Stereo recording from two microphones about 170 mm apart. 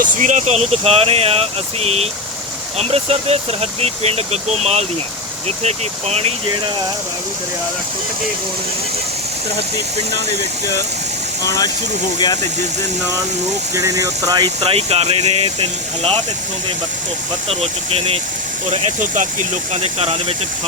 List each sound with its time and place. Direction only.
0.0 s speech: 45° right (ahead or behind)
11.4 s speech: 20° left (ahead or behind)
13.7 s speech: 20° right (ahead or behind); by 15.4 s 35° right (ahead or behind)
17.5 s speech: 35° right (ahead or behind)